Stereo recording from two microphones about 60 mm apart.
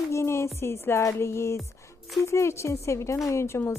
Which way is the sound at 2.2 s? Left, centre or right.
Left.